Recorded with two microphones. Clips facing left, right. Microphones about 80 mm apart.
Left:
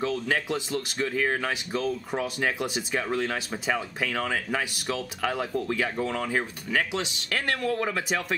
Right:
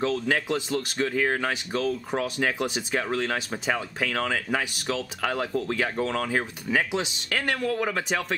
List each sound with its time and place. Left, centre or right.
0.0 s speech: centre
1.8 s speech: centre
2.4 s speech: centre